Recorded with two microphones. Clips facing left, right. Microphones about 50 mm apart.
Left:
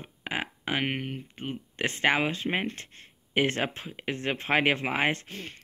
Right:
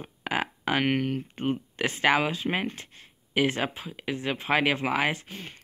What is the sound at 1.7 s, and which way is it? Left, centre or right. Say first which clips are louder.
Speech: right 1 dB; left.